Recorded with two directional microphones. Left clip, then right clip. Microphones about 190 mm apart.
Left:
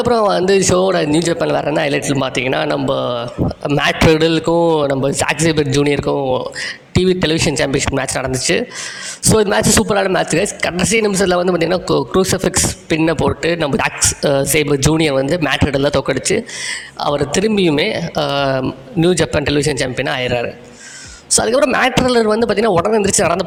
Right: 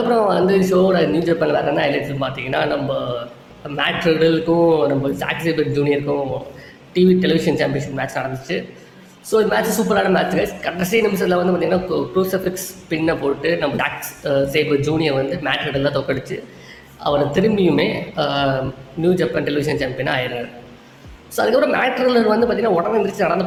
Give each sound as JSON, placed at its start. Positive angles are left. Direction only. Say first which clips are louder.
{"t": 0.1, "sound": "a man's voice", "louder": "left 3 dB", "side_deg": 50}